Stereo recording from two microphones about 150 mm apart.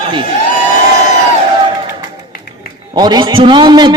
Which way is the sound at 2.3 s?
85° left.